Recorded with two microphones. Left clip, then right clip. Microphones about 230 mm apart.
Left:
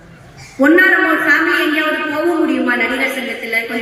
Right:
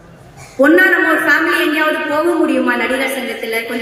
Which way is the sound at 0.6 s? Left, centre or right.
Centre.